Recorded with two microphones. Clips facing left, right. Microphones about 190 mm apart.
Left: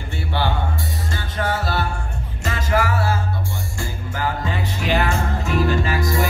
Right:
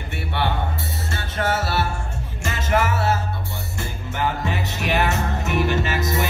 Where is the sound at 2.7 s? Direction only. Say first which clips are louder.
Even; 20° right (ahead or behind).